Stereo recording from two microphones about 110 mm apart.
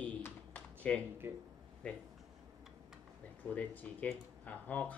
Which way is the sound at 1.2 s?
20° right (ahead or behind).